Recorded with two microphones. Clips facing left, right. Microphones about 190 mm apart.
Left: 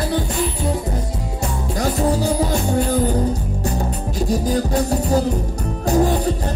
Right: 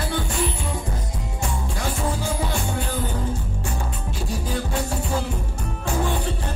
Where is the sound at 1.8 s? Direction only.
40° left (ahead or behind).